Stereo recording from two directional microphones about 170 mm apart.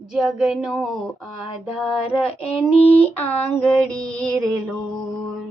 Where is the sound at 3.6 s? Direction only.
5° left (ahead or behind).